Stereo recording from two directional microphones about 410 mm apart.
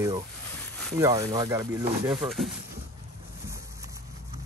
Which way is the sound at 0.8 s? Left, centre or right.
Centre.